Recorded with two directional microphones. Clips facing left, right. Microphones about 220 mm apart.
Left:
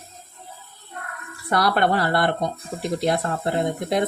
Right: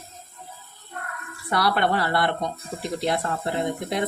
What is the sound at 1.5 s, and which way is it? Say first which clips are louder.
Speech: left 2 dB; 45° left (ahead or behind).